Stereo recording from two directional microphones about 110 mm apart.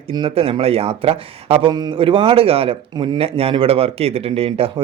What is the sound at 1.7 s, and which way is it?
Speech, 40° right (ahead or behind).